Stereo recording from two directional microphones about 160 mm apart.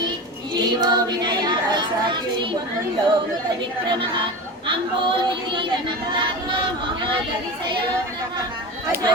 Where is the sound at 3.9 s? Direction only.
30° right (ahead or behind).